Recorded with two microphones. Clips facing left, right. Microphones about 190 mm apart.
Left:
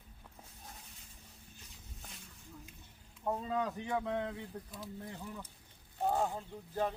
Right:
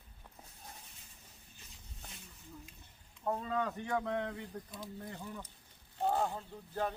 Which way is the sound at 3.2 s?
10° left (ahead or behind).